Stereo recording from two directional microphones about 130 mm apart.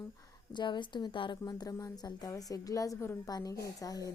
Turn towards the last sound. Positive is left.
turn(degrees=25)  # may be behind; listen again after turning